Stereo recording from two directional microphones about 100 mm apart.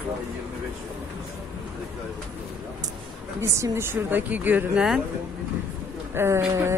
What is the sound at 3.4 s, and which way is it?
Speech, 30° right (ahead or behind).